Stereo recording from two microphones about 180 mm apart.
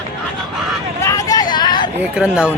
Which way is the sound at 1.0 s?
20° left (ahead or behind).